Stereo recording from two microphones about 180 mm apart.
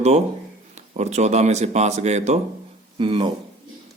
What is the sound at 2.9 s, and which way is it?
Speech, 25° right (ahead or behind).